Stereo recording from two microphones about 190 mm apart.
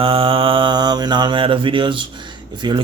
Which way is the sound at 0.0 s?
30° right (ahead or behind).